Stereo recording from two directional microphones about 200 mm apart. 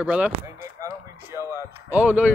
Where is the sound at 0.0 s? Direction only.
5° right (ahead or behind).